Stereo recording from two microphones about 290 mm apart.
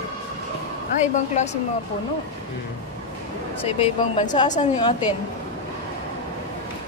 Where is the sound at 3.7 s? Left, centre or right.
Centre.